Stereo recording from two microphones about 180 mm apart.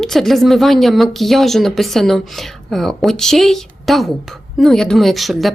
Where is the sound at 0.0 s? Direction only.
Centre (ahead or behind).